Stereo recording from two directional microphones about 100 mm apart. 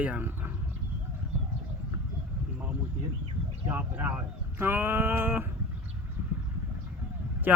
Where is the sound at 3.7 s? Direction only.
15° right (ahead or behind).